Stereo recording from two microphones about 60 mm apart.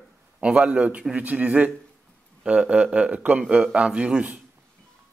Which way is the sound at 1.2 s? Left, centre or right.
Right.